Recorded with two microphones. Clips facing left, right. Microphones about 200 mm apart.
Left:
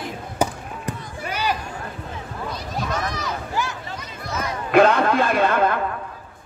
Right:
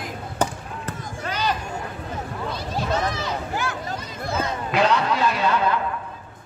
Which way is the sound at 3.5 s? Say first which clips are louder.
Even; 55° right (ahead or behind).